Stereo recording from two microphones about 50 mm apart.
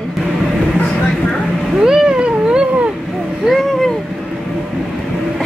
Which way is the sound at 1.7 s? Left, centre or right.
Centre.